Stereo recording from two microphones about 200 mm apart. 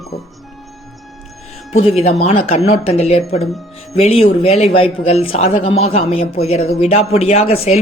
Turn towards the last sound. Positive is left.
turn(degrees=30)  # may be behind; listen again after turning